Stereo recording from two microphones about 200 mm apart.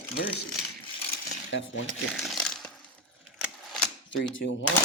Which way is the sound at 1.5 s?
70° left (ahead or behind).